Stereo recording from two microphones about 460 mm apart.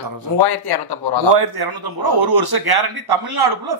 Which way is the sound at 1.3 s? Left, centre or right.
Right.